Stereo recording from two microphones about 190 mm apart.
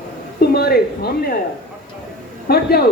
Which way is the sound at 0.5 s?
55° left (ahead or behind).